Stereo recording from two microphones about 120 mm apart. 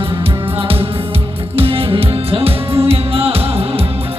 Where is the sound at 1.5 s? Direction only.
50° right (ahead or behind).